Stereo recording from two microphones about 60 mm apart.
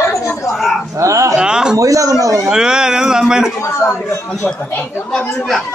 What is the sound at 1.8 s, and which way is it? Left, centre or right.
Speech, right.